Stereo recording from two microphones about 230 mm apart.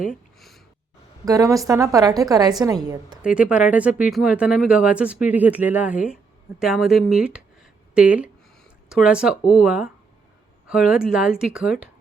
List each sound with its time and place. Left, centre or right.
0.3 s a sound: centre
1.2 s a woman's voice: centre
3.2 s speech: centre